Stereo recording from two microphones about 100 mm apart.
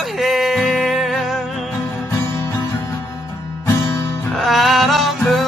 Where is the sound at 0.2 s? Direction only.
Centre (ahead or behind).